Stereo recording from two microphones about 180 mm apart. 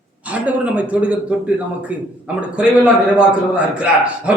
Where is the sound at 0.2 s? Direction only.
5° right (ahead or behind).